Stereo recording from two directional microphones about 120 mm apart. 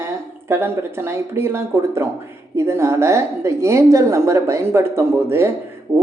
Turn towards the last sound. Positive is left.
turn(degrees=-20)  # may be behind; listen again after turning